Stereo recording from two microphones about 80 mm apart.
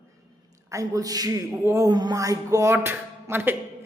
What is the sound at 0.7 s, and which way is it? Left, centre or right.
Speech, right.